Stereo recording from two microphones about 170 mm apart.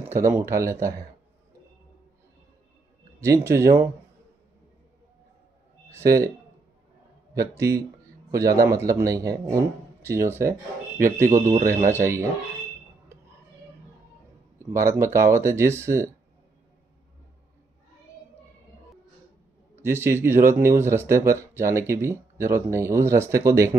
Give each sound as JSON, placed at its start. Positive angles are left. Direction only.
{"t": 0.1, "sound": "speech", "side_deg": -15}
{"t": 3.2, "sound": "speech", "side_deg": -15}
{"t": 5.9, "sound": "speech", "side_deg": -15}
{"t": 7.3, "sound": "a man's voice", "side_deg": -20}
{"t": 14.6, "sound": "speech", "side_deg": -15}
{"t": 19.8, "sound": "speech", "side_deg": -15}